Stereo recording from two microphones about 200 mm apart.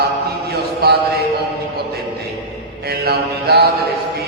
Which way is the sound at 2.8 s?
50° right (ahead or behind).